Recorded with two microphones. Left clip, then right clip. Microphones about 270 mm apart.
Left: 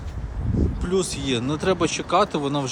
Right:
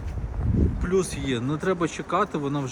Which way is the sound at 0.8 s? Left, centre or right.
Centre.